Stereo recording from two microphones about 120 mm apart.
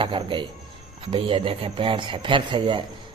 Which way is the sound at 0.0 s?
45° right (ahead or behind).